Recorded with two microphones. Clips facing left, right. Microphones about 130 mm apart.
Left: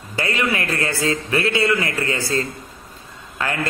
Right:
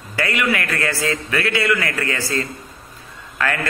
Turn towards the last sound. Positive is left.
turn(degrees=25)  # may be behind; listen again after turning